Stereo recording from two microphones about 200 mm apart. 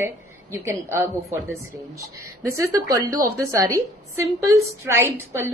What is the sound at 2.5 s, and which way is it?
A woman's voice, 15° right (ahead or behind).